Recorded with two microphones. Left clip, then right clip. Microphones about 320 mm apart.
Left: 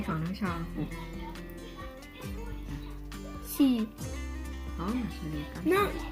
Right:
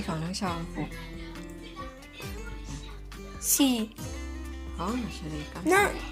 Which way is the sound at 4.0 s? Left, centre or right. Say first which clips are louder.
Right 1 dB; centre.